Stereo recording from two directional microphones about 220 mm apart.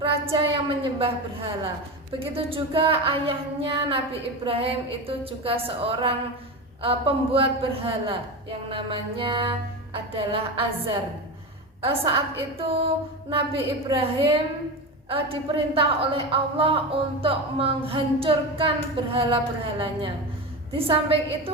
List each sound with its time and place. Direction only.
0.0 s a woman's voice: 25° right (ahead or behind)
12.5 s a woman's voice: 25° right (ahead or behind)